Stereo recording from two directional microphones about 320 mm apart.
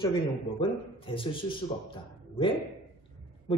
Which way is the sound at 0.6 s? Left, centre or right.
Centre.